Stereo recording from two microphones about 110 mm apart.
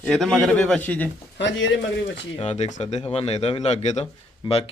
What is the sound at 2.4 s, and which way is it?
A man's voice, 90° left.